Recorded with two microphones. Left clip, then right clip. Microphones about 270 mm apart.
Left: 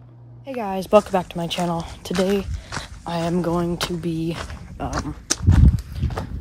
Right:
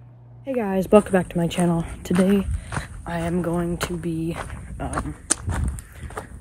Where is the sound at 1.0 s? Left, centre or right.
Right.